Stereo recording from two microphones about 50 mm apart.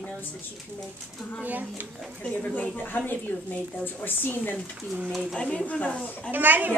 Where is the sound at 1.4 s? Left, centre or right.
Right.